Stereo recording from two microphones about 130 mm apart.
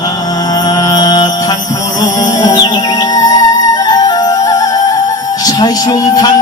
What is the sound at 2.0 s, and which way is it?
Music, 30° left (ahead or behind).